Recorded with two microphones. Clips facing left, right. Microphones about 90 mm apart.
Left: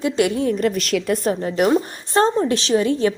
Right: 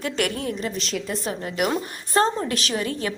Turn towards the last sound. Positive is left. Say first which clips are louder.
# left 9 dB
turn(degrees=30)  # may be behind; listen again after turning